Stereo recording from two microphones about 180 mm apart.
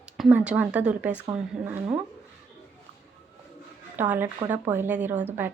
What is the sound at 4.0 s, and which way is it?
A woman's voice, 10° right (ahead or behind).